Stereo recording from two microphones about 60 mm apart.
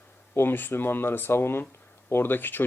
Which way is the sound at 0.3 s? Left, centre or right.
Left.